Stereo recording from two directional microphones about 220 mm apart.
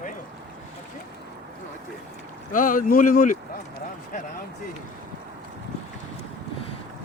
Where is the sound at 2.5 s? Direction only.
35° left (ahead or behind).